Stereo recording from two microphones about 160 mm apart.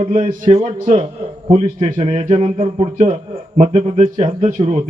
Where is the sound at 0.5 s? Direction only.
40° right (ahead or behind).